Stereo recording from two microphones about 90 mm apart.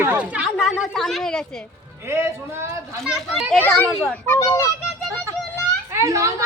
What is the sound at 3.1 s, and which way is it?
Speech, 10° right (ahead or behind).